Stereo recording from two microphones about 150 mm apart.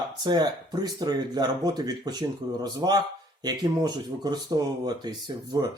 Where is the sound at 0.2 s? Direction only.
25° right (ahead or behind).